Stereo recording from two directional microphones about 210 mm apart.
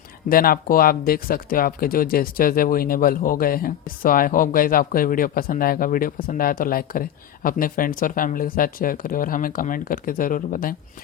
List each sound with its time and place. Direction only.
0.3 s speech: 45° left (ahead or behind)